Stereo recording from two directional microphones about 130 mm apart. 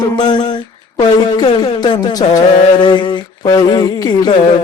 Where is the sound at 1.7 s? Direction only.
35° left (ahead or behind).